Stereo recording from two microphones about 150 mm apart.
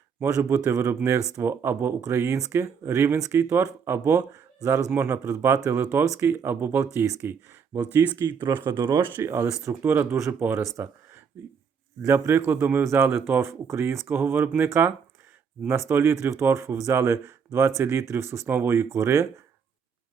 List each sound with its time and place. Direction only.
0.4 s speech: 20° right (ahead or behind)
8.8 s speech: 30° right (ahead or behind)
9.1 s speech: 15° right (ahead or behind)
12.0 s speech: 15° right (ahead or behind)